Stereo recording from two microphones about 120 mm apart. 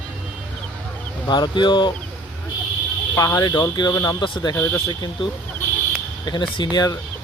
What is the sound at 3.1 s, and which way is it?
Speech, 30° left (ahead or behind).